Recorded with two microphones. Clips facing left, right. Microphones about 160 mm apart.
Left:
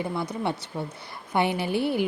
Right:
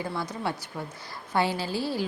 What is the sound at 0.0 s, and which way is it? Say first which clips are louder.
Speech: left 3 dB; 20° left (ahead or behind).